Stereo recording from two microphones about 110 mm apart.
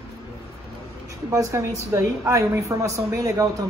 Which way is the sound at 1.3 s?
30° right (ahead or behind).